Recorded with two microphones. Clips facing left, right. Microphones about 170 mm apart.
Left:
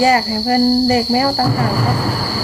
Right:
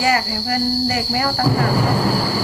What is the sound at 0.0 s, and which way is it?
Cricket, 30° left (ahead or behind).